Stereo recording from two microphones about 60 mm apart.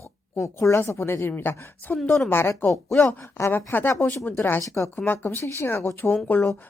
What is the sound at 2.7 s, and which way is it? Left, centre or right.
Speech, centre.